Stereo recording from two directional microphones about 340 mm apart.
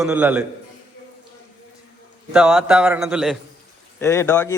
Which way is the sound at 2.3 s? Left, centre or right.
Centre.